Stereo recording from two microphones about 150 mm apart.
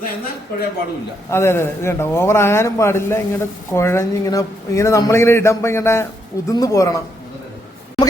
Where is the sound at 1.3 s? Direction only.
15° left (ahead or behind).